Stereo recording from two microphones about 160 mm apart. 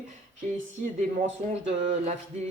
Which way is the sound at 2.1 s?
45° right (ahead or behind).